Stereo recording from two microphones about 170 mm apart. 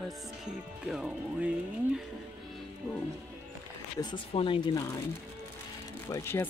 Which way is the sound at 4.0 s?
30° left (ahead or behind).